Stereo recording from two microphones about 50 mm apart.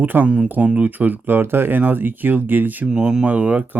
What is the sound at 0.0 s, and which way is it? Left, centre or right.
Speech, right.